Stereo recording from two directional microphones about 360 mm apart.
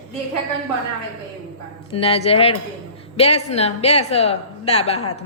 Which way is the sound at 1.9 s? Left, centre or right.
Centre.